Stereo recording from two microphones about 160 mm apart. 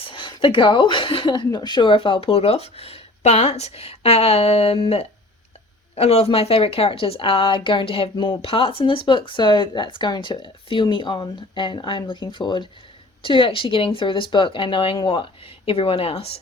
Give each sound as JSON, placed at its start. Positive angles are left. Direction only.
{"t": 0.0, "sound": "speech", "side_deg": 30}